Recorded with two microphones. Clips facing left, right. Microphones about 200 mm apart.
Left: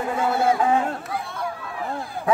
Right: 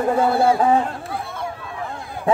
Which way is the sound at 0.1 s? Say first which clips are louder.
Right 3 dB; 35° right (ahead or behind).